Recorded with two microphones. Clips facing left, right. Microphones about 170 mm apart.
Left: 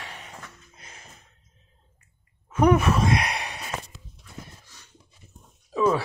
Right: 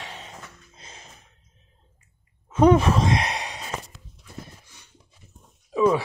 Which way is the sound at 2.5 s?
25° right (ahead or behind).